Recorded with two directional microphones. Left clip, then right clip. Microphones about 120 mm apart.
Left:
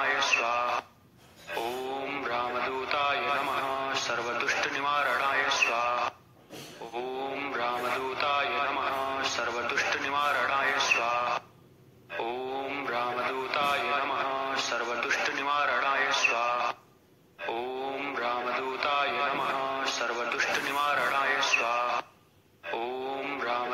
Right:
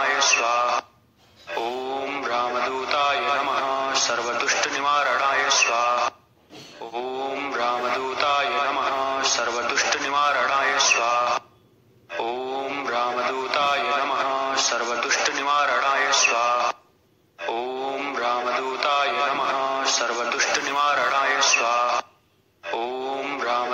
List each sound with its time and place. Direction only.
0.0 s speech: 40° right (ahead or behind)
1.5 s synthetic singing: 40° right (ahead or behind)
7.0 s mantra: 40° right (ahead or behind)